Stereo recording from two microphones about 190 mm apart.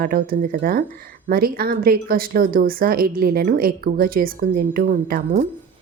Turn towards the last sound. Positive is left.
turn(degrees=-45)  # may be behind; listen again after turning